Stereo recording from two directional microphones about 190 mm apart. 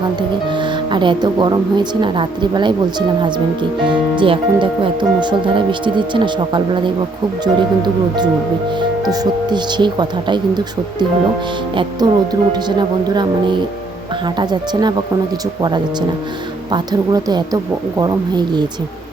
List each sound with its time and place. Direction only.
0.2 s speech: 25° right (ahead or behind)
11.8 s speech: 20° right (ahead or behind)